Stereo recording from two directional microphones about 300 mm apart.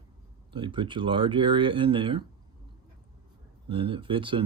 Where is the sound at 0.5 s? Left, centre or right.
Centre.